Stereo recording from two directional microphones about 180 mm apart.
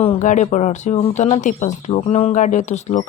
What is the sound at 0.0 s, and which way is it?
Speech, 40° left (ahead or behind).